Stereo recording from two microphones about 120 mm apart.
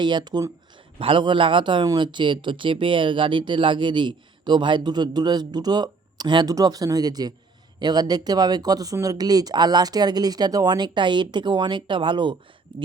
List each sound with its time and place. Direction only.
0.0 s speech: 40° right (ahead or behind)
0.9 s speech: 45° right (ahead or behind)